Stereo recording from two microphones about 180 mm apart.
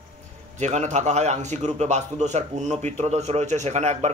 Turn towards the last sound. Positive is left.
turn(degrees=-40)  # may be behind; listen again after turning